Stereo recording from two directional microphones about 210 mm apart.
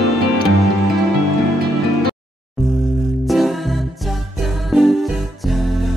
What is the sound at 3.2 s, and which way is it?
Music, centre (ahead or behind).